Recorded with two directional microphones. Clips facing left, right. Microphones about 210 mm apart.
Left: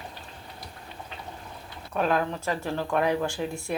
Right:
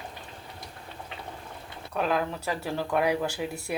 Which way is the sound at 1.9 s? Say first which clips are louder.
Left 2 dB; centre (ahead or behind).